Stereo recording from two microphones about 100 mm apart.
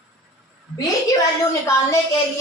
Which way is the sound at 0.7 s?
35° left (ahead or behind).